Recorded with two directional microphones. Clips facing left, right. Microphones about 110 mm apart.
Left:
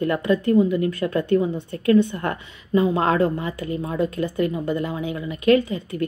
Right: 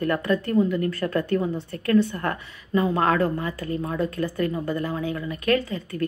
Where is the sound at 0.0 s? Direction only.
20° left (ahead or behind).